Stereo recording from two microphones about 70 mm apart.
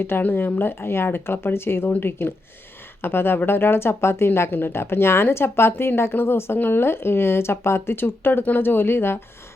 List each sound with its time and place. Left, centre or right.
0.0 s speech: left